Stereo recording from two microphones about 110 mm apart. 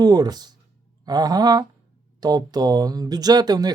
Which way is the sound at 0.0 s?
35° right (ahead or behind).